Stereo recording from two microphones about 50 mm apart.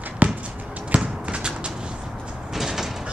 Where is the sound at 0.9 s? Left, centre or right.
Right.